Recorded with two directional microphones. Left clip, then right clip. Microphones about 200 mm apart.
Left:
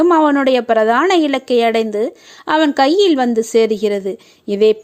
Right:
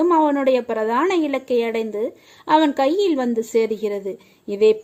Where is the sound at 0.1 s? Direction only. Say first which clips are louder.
Left 4 dB; 15° left (ahead or behind).